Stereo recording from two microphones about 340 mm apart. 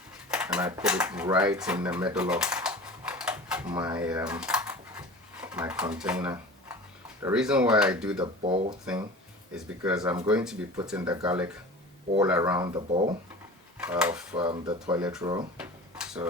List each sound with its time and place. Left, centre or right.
0.3 s typewriter: centre
7.2 s speech: centre
8.2 s speech: centre
9.6 s speech: centre
13.7 s speech: centre